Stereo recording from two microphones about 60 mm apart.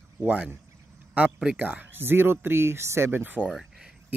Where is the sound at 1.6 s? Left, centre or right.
Right.